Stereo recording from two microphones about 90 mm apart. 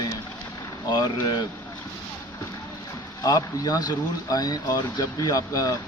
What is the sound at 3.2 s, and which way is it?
Speech, 50° left (ahead or behind).